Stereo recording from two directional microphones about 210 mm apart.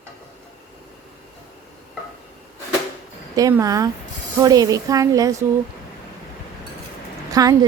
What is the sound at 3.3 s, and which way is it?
Speech, 15° right (ahead or behind).